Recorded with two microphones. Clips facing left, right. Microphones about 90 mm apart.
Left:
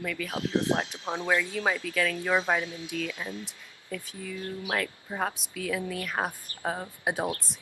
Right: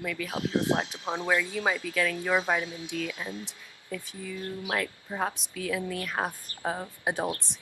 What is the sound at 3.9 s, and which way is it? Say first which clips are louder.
Speech: even; centre (ahead or behind).